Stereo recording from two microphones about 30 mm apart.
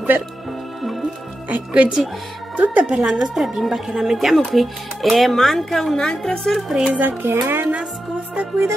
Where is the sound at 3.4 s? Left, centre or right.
Centre.